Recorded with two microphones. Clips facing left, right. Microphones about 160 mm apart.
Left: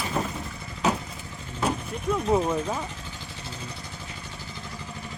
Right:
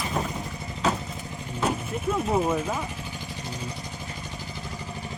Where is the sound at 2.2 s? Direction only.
5° right (ahead or behind).